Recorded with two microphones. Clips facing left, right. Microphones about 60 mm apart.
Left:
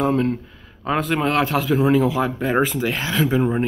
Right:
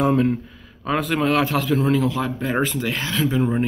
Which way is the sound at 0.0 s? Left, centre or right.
Centre.